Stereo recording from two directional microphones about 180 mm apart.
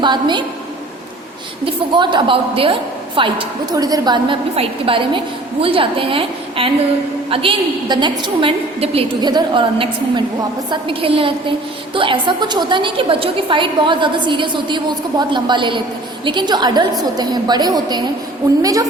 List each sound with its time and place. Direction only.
0.0 s a woman's voice: 25° right (ahead or behind)
1.6 s a woman's voice: 25° right (ahead or behind)